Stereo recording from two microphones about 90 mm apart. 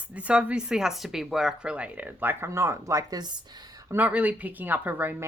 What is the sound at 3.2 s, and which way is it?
Speech, 50° right (ahead or behind).